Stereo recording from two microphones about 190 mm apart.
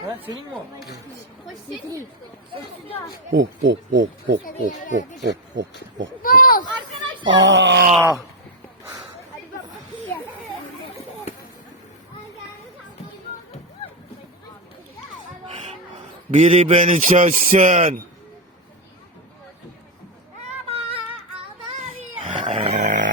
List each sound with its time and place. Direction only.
3.3 s speech: 70° right (ahead or behind)
4.4 s speech: 45° left (ahead or behind)
5.2 s speech: 70° right (ahead or behind)
6.2 s speech: 50° left (ahead or behind)
7.3 s speech: 80° right
8.8 s a sound: 15° right (ahead or behind)
16.3 s a man's voice: 35° right (ahead or behind)
20.7 s a sound: 30° right (ahead or behind)
22.2 s a sound: 25° right (ahead or behind)